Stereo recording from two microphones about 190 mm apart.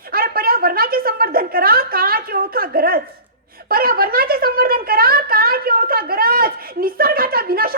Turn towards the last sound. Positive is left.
turn(degrees=-50)  # may be behind; listen again after turning